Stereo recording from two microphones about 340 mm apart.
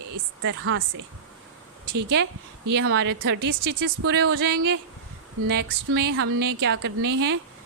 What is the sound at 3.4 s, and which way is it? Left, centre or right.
Speech, right.